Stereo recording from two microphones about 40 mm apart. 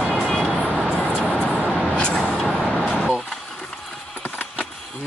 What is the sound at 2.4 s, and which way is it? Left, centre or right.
Vehicle, centre.